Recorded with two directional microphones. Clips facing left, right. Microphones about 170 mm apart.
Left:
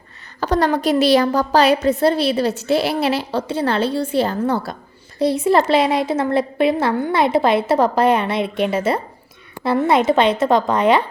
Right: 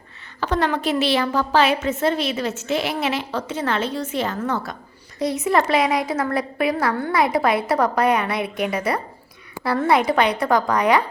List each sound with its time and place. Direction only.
0.3 s a woman's voice: 40° left (ahead or behind)